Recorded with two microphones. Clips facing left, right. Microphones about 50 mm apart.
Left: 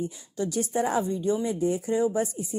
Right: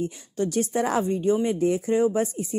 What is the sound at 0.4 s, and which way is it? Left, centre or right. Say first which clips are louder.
Speech: right 3 dB; right.